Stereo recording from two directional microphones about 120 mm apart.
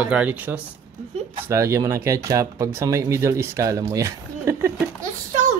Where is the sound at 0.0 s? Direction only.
10° right (ahead or behind).